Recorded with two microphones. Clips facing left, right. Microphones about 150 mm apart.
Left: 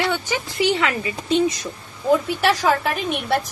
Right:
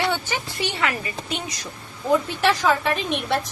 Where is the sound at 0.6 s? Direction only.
20° left (ahead or behind).